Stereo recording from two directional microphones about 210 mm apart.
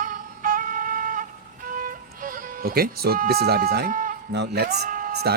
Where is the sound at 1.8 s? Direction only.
40° right (ahead or behind).